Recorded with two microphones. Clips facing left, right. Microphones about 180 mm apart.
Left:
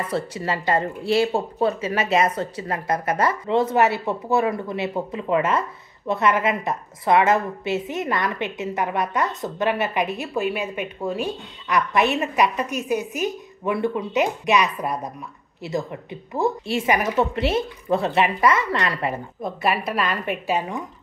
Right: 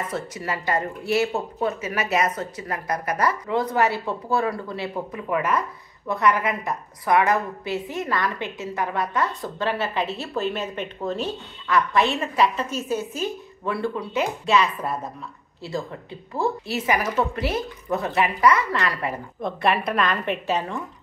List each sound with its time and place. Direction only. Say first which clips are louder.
0.1 s a woman's voice: left 4 dB; 30° left (ahead or behind)
19.4 s a woman's voice: right 1 dB; 5° left (ahead or behind)